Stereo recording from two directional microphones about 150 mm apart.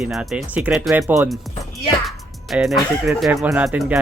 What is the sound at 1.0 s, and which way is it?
Speech, 15° right (ahead or behind).